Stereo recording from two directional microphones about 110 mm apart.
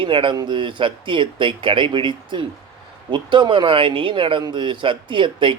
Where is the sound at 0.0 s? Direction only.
50° right (ahead or behind).